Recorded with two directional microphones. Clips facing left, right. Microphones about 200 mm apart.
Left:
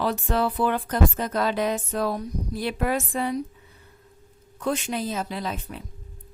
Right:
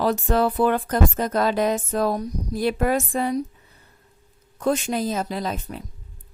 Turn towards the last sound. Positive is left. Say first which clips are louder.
# right 3 dB
turn(degrees=-40)  # may be behind; listen again after turning